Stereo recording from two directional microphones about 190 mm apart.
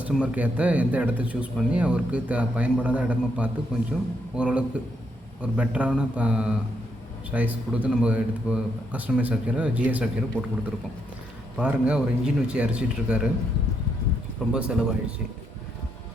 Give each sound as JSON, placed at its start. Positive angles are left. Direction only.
{"t": 0.0, "sound": "a man's voice", "side_deg": -5}
{"t": 11.5, "sound": "speech", "side_deg": -5}
{"t": 14.5, "sound": "speech", "side_deg": -5}